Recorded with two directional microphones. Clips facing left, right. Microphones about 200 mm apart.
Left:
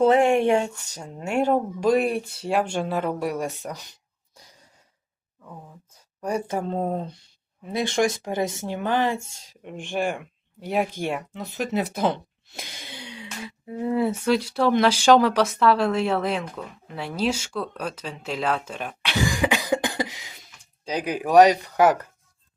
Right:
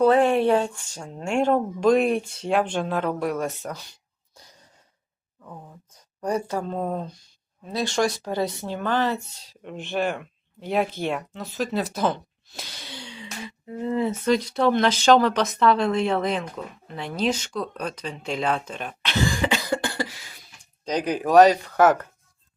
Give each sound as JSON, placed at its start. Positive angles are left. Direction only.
{"t": 0.0, "sound": "speech", "side_deg": 20}
{"t": 1.0, "sound": "speech", "side_deg": 5}
{"t": 6.5, "sound": "speech", "side_deg": 20}
{"t": 9.2, "sound": "speech", "side_deg": 45}
{"t": 9.6, "sound": "speech", "side_deg": 15}
{"t": 12.5, "sound": "a sound", "side_deg": 15}
{"t": 13.7, "sound": "speech", "side_deg": 10}